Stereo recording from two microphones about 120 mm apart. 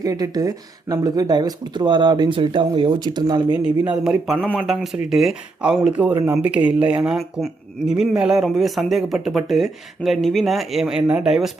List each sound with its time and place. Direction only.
0.0 s speech: 30° right (ahead or behind)
3.8 s speech: 5° right (ahead or behind)